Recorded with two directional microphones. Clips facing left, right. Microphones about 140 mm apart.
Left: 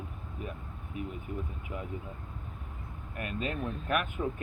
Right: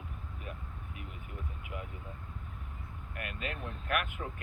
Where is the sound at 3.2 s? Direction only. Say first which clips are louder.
Left 6 dB; 35° left (ahead or behind).